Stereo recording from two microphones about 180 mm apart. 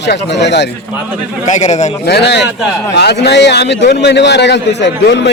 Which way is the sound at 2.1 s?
70° left (ahead or behind).